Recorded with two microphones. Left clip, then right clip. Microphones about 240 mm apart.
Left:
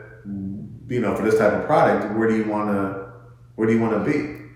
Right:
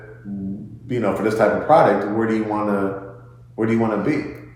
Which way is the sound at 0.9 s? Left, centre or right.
Right.